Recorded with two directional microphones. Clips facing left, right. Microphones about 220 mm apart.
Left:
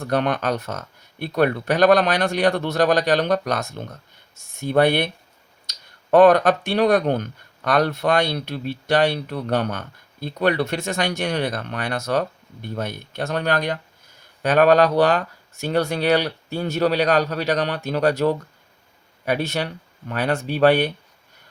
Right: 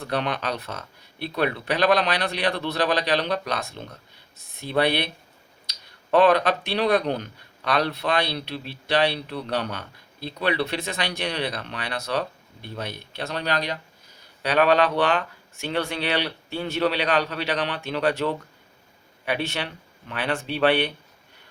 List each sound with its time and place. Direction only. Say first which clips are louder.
0.0 s speech: left 5 dB; 45° left (ahead or behind)